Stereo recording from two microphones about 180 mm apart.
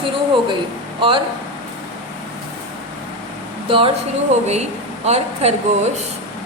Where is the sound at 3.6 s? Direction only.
30° right (ahead or behind).